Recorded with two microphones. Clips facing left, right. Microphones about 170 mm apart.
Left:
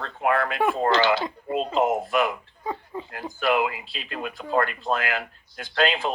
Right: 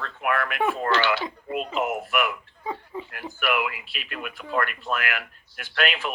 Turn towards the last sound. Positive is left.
turn(degrees=30)  # may be behind; listen again after turning